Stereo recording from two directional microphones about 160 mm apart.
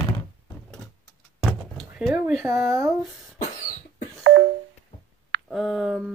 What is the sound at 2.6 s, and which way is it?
Speech, 20° right (ahead or behind).